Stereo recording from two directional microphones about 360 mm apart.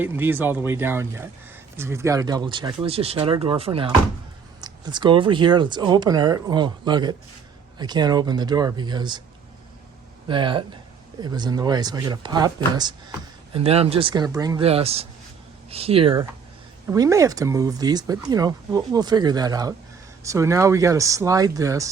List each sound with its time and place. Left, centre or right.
0.0 s speech: centre
10.2 s speech: centre